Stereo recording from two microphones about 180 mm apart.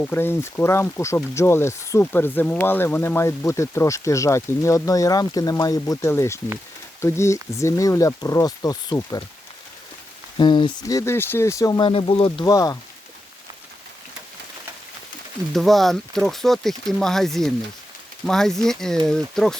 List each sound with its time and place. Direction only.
0.0 s speech: 10° left (ahead or behind)
10.3 s speech: 25° left (ahead or behind)
12.5 s speech: 20° left (ahead or behind)
15.5 s speech: centre (ahead or behind)